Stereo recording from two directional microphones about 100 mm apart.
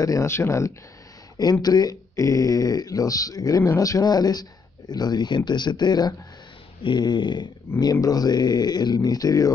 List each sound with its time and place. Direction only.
0.0 s speech: 30° left (ahead or behind)
1.4 s speech: 40° left (ahead or behind)
6.8 s a sound: 50° left (ahead or behind)
7.8 s speech: 40° left (ahead or behind)